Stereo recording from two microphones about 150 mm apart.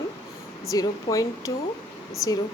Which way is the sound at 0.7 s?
25° left (ahead or behind).